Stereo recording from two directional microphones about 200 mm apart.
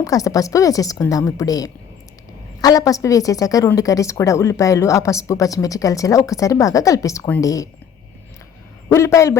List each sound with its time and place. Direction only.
0.0 s a woman's voice: 15° left (ahead or behind)
8.9 s a woman's voice: 15° left (ahead or behind)